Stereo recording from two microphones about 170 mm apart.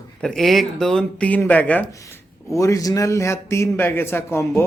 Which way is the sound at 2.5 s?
20° left (ahead or behind).